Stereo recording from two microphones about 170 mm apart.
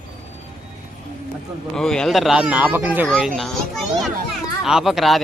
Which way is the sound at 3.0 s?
5° left (ahead or behind).